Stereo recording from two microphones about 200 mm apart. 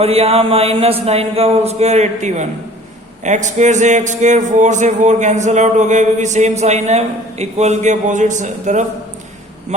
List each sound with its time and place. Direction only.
0.0 s speech: 30° right (ahead or behind)